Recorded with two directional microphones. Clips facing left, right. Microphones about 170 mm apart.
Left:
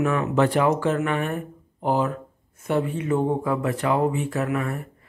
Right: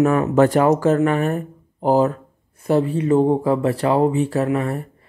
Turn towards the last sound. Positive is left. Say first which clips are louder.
# right 5 dB
turn(degrees=-35)  # may be behind; listen again after turning